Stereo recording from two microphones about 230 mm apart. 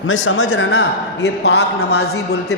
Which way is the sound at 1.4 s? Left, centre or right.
Left.